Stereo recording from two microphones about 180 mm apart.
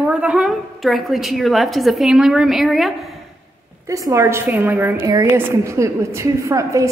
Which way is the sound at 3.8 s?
15° right (ahead or behind).